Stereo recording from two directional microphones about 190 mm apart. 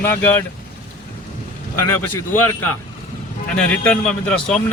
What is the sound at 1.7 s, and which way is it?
Speech, 10° left (ahead or behind).